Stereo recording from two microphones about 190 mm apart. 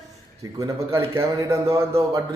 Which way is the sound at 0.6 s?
15° right (ahead or behind).